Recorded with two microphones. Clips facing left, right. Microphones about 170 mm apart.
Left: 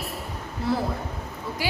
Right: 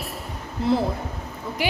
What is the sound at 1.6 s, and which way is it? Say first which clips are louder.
Speech: right 4 dB; 20° right (ahead or behind).